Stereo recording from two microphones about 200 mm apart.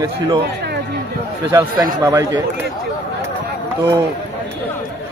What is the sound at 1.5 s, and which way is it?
Speech, 15° right (ahead or behind).